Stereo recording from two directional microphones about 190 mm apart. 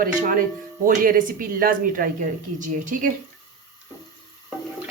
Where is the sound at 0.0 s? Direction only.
45° right (ahead or behind).